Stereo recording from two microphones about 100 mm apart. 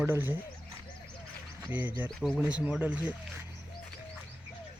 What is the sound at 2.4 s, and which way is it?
Speech, 10° right (ahead or behind).